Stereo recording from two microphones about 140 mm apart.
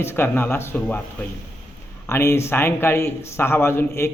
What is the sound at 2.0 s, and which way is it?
A man's voice, 20° left (ahead or behind).